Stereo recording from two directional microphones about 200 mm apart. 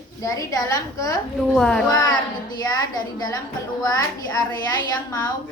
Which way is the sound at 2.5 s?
20° left (ahead or behind).